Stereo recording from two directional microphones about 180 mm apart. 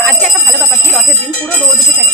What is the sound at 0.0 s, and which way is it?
Bell, centre (ahead or behind).